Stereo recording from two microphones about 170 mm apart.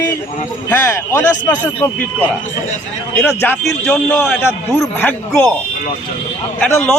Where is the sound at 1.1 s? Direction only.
10° left (ahead or behind).